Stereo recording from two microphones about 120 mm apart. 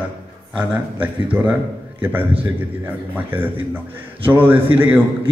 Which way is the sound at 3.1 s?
15° right (ahead or behind).